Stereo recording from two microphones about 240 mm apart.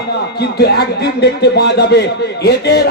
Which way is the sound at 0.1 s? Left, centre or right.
Left.